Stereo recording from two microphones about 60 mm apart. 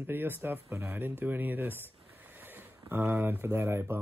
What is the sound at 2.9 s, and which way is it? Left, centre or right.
Speech, right.